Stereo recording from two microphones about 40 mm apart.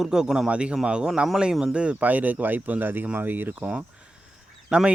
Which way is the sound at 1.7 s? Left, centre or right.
Right.